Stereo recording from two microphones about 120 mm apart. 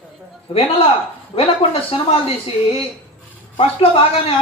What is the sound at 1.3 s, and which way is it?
Speech, 55° left (ahead or behind).